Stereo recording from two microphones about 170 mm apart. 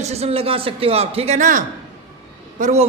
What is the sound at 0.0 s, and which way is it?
Speech, 40° right (ahead or behind).